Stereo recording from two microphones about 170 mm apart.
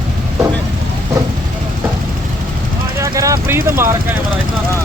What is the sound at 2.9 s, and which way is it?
Vehicle, 20° right (ahead or behind).